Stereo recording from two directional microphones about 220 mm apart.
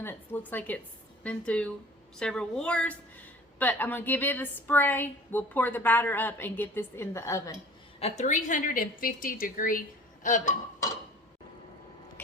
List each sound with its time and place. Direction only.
0.0 s a woman's voice: 10° left (ahead or behind)
7.9 s a woman's voice: 30° left (ahead or behind)